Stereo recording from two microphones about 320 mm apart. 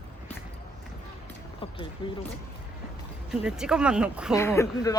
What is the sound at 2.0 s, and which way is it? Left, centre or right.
Speech, centre.